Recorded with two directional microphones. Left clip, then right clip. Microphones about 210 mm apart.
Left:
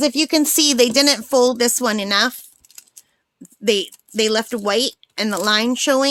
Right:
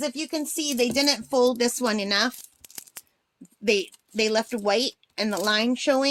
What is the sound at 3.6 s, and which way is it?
Speech, 30° left (ahead or behind).